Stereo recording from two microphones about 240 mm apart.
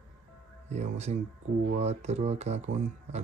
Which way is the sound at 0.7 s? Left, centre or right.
Right.